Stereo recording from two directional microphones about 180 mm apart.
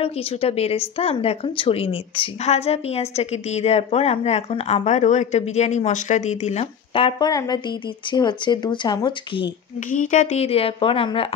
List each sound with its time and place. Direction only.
0.0 s speech: 35° left (ahead or behind)
9.8 s speech: 45° left (ahead or behind)